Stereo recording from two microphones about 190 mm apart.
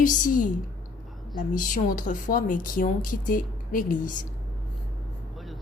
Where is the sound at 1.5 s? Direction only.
45° left (ahead or behind).